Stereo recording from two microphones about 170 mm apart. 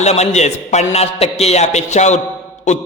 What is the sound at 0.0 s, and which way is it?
A man's voice, 40° left (ahead or behind).